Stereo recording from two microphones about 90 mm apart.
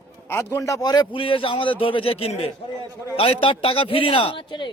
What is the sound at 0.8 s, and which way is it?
A man's voice, 50° left (ahead or behind).